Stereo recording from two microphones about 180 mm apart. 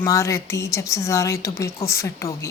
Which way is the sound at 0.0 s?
15° left (ahead or behind).